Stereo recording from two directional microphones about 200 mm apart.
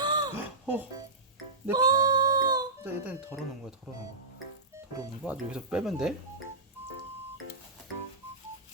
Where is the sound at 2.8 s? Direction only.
10° right (ahead or behind).